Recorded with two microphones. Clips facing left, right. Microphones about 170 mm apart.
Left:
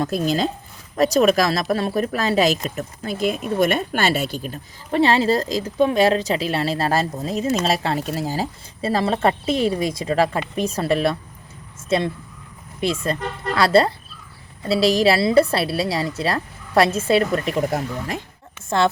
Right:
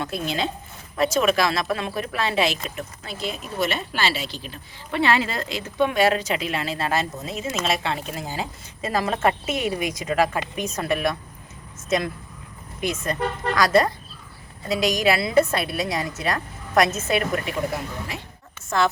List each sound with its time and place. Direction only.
0.0 s speech: 40° left (ahead or behind)
18.7 s a woman's voice: 25° left (ahead or behind)